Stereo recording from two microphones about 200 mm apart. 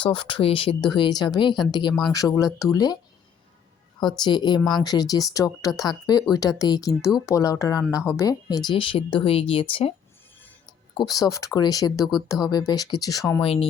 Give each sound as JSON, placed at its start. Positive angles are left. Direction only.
{"t": 0.0, "sound": "speech", "side_deg": 25}
{"t": 4.2, "sound": "speech", "side_deg": 20}
{"t": 10.9, "sound": "speech", "side_deg": 20}
{"t": 13.4, "sound": "speech", "side_deg": 30}